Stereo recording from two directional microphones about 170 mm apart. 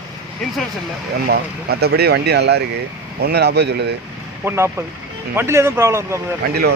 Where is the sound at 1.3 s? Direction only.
70° right (ahead or behind).